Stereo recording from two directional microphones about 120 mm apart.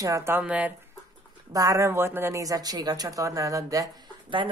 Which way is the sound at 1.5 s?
30° right (ahead or behind).